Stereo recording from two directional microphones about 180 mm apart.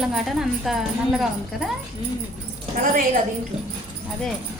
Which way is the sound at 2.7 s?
50° right (ahead or behind).